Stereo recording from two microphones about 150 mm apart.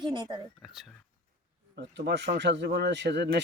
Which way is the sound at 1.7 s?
90° right.